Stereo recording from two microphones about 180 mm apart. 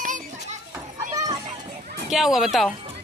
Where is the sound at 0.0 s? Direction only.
45° right (ahead or behind).